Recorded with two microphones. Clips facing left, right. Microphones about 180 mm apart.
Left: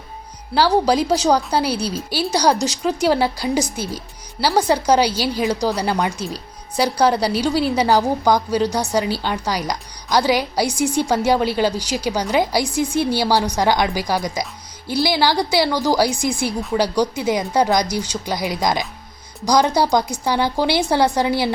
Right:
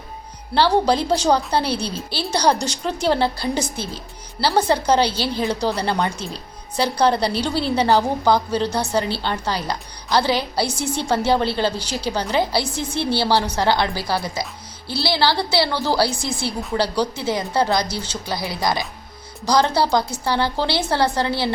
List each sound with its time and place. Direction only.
0.5 s a woman's voice: 10° left (ahead or behind)